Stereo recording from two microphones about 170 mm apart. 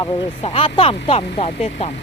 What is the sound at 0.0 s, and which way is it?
Speech, 30° left (ahead or behind).